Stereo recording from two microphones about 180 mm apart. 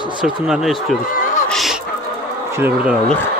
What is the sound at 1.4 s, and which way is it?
Fowl, centre (ahead or behind).